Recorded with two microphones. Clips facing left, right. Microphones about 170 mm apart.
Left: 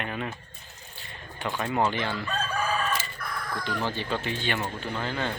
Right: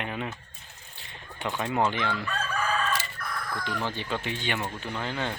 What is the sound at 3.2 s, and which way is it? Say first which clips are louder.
Chicken: even; centre (ahead or behind).